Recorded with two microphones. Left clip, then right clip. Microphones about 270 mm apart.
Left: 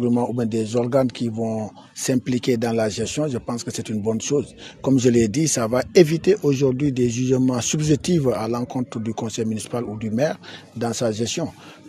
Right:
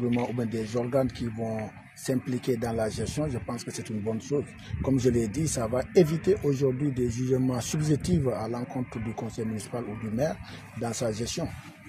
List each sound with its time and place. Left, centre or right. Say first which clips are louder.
0.1 s speech: left 7 dB; left